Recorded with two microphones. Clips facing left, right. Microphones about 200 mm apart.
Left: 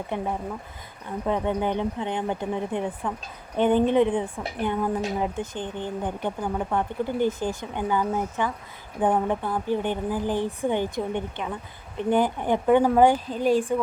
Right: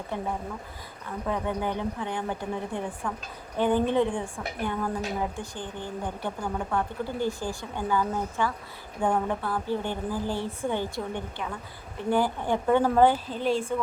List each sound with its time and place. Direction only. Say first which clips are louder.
1.3 s a woman's voice: left 4 dB; 20° left (ahead or behind)